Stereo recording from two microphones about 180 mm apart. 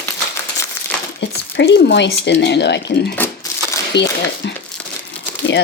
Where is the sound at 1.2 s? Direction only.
70° left (ahead or behind).